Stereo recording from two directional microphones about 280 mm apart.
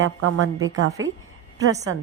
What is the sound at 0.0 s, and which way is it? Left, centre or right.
Speech, right.